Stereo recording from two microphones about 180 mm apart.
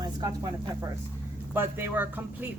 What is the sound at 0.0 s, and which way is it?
Speech, 20° right (ahead or behind).